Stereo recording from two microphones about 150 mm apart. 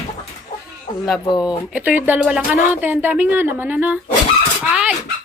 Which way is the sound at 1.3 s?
25° left (ahead or behind).